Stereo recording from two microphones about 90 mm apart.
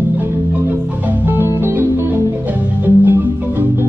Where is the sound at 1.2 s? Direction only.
25° right (ahead or behind).